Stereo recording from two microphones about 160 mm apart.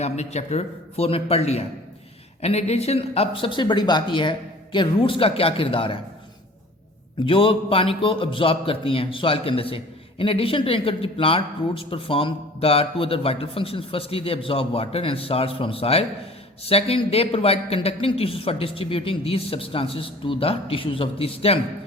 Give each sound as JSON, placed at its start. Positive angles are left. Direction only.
{"t": 0.0, "sound": "a man's voice", "side_deg": 45}
{"t": 7.3, "sound": "a man's voice", "side_deg": 35}